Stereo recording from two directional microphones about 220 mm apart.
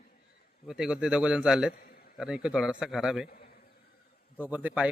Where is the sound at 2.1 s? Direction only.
5° right (ahead or behind).